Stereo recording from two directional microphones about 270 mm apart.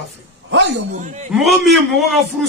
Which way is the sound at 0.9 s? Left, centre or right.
Right.